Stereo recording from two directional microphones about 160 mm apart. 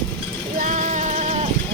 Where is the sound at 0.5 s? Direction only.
55° right (ahead or behind).